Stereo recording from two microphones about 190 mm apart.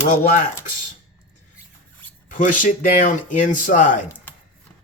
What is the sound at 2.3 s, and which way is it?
Speech, 40° left (ahead or behind).